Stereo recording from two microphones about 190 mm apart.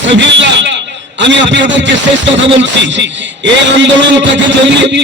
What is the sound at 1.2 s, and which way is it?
Speech, 70° right (ahead or behind).